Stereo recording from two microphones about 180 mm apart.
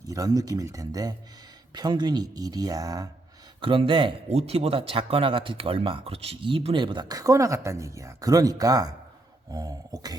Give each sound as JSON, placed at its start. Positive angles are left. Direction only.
{"t": 0.1, "sound": "speech", "side_deg": -20}